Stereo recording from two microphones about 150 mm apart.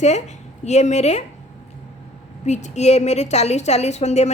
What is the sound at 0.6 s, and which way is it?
Speech, 50° left (ahead or behind).